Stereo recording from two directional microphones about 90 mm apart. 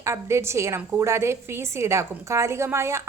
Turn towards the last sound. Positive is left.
turn(degrees=-30)  # may be behind; listen again after turning